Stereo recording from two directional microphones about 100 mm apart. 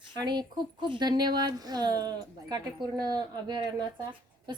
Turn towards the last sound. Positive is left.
turn(degrees=-45)  # may be behind; listen again after turning